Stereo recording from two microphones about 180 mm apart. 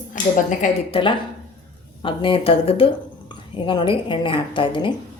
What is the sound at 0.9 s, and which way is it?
Speech, 30° left (ahead or behind).